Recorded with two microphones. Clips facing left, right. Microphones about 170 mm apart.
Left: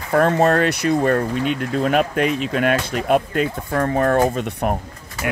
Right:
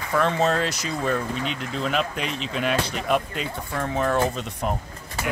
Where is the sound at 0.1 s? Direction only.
50° left (ahead or behind).